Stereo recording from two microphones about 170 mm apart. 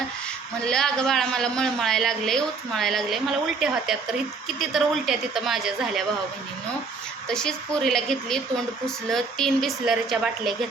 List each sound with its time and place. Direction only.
0.6 s a man's voice: 5° left (ahead or behind)
7.3 s a man's voice: 5° left (ahead or behind)